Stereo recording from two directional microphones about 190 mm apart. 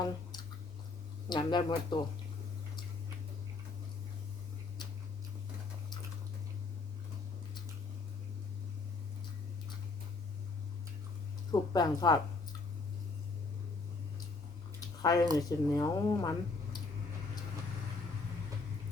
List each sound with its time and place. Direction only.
1.3 s speech: 25° left (ahead or behind)
11.5 s speech: 20° left (ahead or behind)
14.8 s a sound: 20° left (ahead or behind)
15.4 s speech: 20° left (ahead or behind)